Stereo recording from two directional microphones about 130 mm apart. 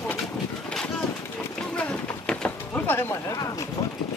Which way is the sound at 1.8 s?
5° left (ahead or behind).